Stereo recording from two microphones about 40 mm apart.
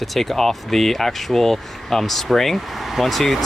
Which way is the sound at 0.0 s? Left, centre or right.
Centre.